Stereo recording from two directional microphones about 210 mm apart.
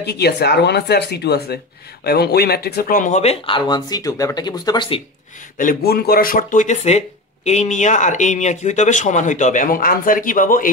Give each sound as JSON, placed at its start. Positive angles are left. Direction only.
{"t": 0.0, "sound": "speech", "side_deg": 50}
{"t": 5.6, "sound": "speech", "side_deg": 45}